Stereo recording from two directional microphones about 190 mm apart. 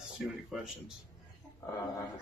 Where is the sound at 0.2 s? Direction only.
Centre (ahead or behind).